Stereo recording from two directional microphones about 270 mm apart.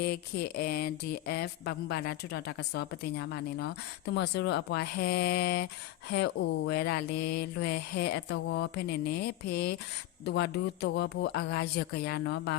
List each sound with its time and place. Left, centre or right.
0.0 s a woman's voice: left